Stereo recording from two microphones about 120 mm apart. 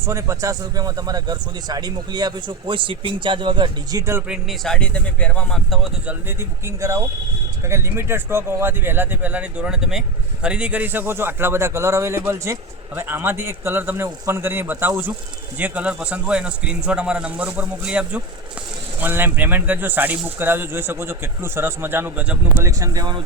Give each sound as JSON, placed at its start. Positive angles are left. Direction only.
{"t": 0.0, "sound": "a man's voice", "side_deg": -25}
{"t": 4.3, "sound": "speech", "side_deg": 0}
{"t": 6.1, "sound": "speech", "side_deg": -20}
{"t": 22.5, "sound": "speech", "side_deg": -25}